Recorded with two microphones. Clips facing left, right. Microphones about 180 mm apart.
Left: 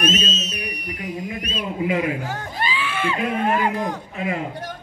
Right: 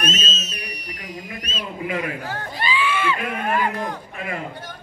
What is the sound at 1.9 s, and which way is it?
Speech, 20° left (ahead or behind).